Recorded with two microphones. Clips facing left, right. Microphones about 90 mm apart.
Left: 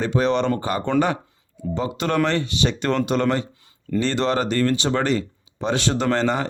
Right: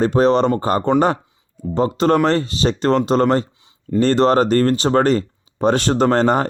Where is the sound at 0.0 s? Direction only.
40° right (ahead or behind).